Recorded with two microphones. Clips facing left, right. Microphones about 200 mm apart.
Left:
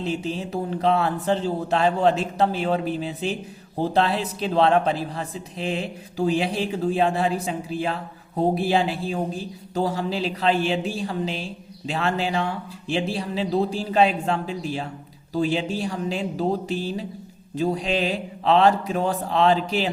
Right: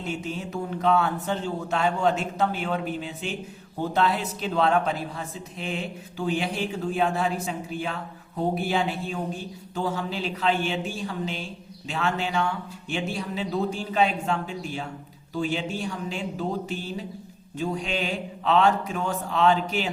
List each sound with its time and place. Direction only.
0.0 s speech: 30° left (ahead or behind)